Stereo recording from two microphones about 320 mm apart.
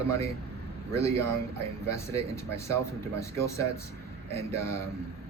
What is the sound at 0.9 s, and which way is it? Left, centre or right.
Speech, centre.